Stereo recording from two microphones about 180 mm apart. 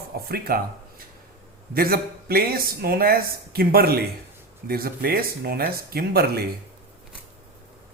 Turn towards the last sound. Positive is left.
turn(degrees=-60)  # may be behind; listen again after turning